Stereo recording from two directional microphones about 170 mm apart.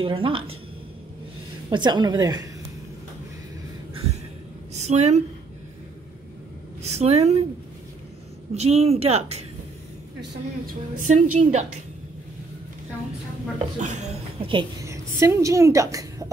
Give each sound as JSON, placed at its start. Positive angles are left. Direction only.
{"t": 0.0, "sound": "a woman's voice", "side_deg": -30}
{"t": 1.7, "sound": "a woman's voice", "side_deg": -25}
{"t": 4.7, "sound": "speech", "side_deg": -40}
{"t": 6.8, "sound": "a woman's voice", "side_deg": -40}
{"t": 8.5, "sound": "a woman's voice", "side_deg": -40}
{"t": 10.7, "sound": "a woman's voice", "side_deg": -50}
{"t": 13.6, "sound": "a woman's voice", "side_deg": -45}
{"t": 14.9, "sound": "speech", "side_deg": -15}